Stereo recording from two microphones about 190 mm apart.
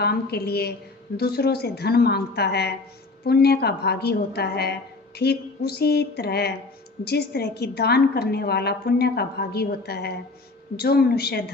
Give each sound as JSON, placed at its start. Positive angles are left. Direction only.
{"t": 0.0, "sound": "a woman's voice", "side_deg": 55}